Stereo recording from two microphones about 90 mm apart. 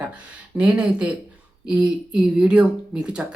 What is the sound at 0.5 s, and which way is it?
Speech, 10° right (ahead or behind).